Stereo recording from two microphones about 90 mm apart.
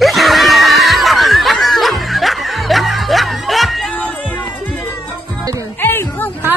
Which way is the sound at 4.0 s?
15° left (ahead or behind).